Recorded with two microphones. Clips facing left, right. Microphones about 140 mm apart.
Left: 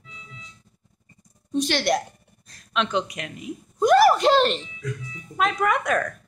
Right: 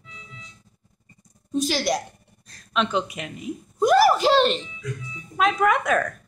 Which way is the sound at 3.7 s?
5° right (ahead or behind).